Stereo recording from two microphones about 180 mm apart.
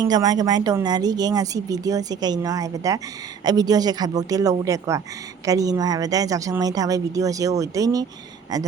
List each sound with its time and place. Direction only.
0.0 s a woman's voice: 20° right (ahead or behind)